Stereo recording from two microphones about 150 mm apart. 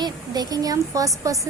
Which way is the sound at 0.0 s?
25° right (ahead or behind).